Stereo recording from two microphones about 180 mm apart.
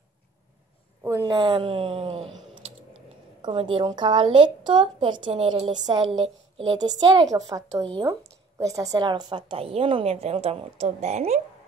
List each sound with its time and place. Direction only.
1.0 s a woman's voice: 20° right (ahead or behind)
3.4 s a woman's voice: 30° right (ahead or behind)